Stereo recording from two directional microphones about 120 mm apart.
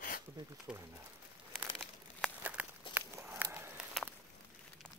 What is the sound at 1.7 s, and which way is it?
Crumpling, 5° left (ahead or behind).